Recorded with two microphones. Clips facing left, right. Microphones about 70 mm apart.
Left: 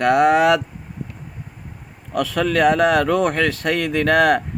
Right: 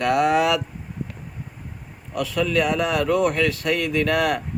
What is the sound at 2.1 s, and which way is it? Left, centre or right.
Speech, left.